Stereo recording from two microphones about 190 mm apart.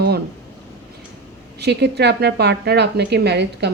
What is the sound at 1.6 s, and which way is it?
A woman's voice, 60° right (ahead or behind).